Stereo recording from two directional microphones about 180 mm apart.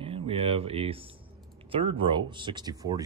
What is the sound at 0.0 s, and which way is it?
Speech, 30° right (ahead or behind).